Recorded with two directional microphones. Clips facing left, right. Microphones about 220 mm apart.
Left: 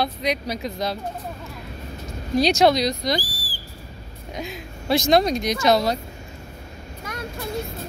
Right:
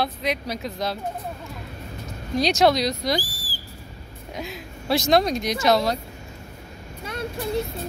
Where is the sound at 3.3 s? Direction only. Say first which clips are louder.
Left 1 dB; 45° right (ahead or behind).